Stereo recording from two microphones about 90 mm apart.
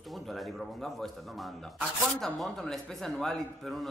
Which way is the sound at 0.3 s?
Centre (ahead or behind).